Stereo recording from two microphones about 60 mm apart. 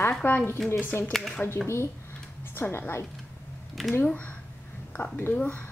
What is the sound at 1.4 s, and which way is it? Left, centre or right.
Speech, left.